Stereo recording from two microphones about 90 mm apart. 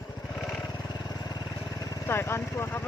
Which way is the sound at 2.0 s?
25° left (ahead or behind).